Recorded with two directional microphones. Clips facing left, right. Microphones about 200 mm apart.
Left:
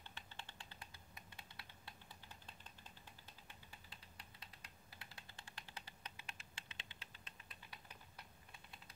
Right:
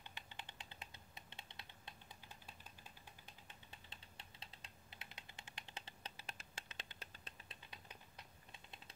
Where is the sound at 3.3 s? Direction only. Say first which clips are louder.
Even; 25° right (ahead or behind).